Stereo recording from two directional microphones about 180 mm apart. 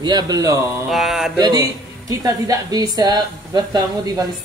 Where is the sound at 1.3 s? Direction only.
20° right (ahead or behind).